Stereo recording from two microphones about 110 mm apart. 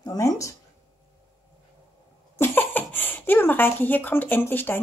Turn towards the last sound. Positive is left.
turn(degrees=20)  # may be behind; listen again after turning